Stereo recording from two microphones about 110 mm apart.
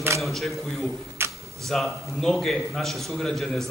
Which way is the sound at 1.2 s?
20° right (ahead or behind).